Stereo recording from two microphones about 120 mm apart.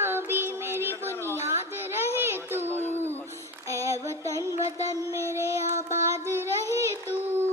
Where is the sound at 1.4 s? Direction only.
20° right (ahead or behind).